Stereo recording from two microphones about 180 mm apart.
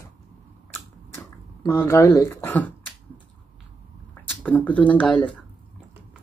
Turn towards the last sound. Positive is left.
turn(degrees=5)  # may be behind; listen again after turning